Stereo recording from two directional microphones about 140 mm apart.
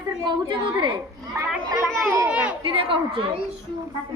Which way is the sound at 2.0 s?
10° right (ahead or behind).